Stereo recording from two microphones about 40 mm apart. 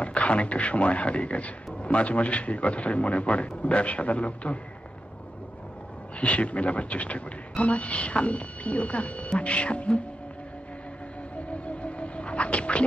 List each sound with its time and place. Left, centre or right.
0.0 s a man's voice: left
6.1 s a man's voice: left
11.3 s music: left